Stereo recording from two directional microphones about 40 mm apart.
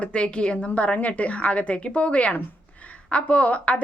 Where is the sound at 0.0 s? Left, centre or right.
Left.